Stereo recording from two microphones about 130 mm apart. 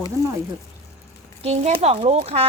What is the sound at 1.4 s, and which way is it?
Speech, 50° right (ahead or behind).